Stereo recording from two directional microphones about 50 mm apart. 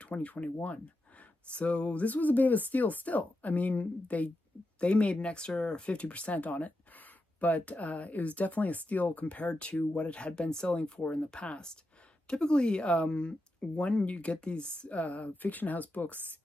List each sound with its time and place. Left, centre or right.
0.0 s speech: left